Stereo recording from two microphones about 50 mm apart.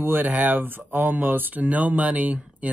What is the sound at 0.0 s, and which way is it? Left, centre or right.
Speech, right.